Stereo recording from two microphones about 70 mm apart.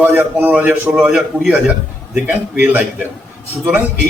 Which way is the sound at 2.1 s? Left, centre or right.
Right.